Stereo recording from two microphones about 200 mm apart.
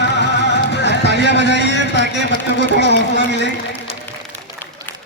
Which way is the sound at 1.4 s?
60° left (ahead or behind).